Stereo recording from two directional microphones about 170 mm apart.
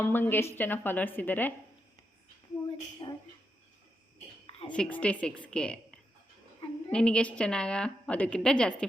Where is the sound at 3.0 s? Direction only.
20° left (ahead or behind).